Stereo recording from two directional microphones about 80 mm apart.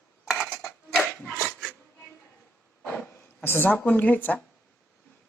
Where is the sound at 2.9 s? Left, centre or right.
Left.